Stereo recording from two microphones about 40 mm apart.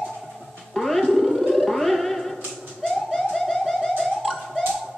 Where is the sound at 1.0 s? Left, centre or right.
Centre.